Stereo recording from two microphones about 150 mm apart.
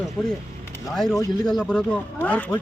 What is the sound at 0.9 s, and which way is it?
Speech, 5° left (ahead or behind).